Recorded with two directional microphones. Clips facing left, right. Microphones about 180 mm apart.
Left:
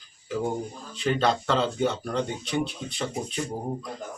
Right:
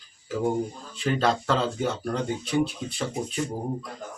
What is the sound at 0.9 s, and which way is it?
Speech, centre (ahead or behind).